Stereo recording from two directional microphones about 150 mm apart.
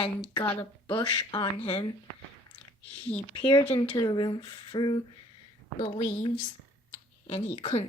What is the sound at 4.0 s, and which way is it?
Speech, 30° left (ahead or behind).